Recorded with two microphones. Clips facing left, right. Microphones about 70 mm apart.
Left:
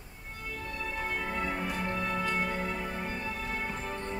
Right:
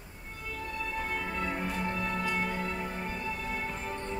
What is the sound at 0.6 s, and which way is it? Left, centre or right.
Music, centre.